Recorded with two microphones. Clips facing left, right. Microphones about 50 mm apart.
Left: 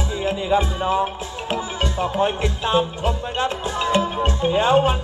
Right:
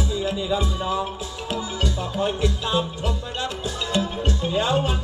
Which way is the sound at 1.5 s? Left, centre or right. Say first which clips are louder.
Left 3 dB; left.